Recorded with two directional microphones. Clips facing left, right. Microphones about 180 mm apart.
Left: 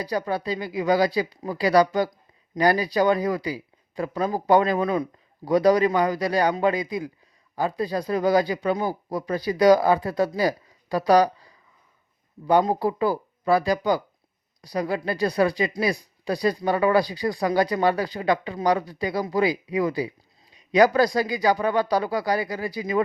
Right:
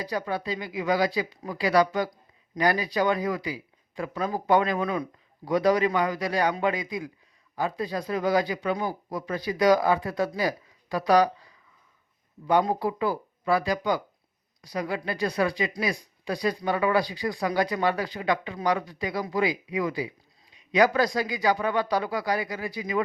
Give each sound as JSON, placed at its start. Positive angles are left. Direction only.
{"t": 0.0, "sound": "speech", "side_deg": 35}